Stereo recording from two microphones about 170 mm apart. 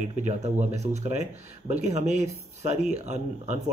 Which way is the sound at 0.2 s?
40° right (ahead or behind).